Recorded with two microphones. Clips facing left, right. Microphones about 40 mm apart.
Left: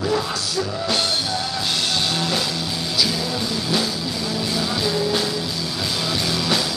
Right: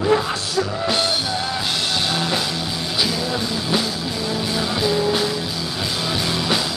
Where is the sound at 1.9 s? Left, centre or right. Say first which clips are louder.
Right 1 dB; centre.